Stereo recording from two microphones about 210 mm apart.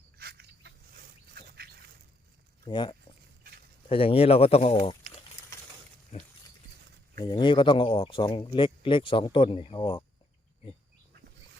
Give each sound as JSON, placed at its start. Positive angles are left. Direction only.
{"t": 0.2, "sound": "a sound", "side_deg": -50}
{"t": 2.6, "sound": "speech", "side_deg": 20}
{"t": 7.2, "sound": "speech", "side_deg": 20}